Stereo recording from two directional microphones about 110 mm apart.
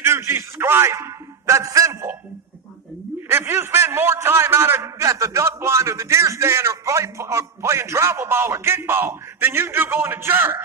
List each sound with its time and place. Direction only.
0.0 s a man's voice: 20° right (ahead or behind)
3.3 s a man's voice: 20° right (ahead or behind)